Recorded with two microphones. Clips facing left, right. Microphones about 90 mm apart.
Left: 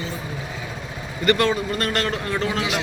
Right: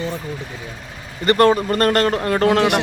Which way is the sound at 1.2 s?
45° right (ahead or behind).